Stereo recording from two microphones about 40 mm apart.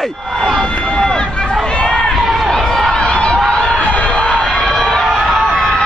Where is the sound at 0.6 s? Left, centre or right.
Left.